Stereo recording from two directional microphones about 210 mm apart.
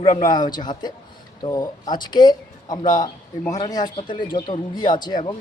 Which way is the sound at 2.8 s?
40° left (ahead or behind).